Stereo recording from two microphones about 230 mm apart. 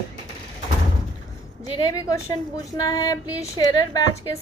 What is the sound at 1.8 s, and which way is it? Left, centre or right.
A woman's voice, centre.